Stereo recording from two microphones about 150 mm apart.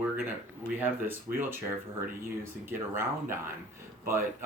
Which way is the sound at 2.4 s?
15° right (ahead or behind).